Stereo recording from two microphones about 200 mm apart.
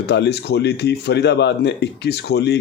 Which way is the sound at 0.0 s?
55° left (ahead or behind).